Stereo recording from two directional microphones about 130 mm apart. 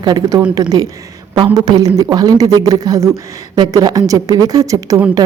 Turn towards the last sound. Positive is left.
turn(degrees=-30)  # may be behind; listen again after turning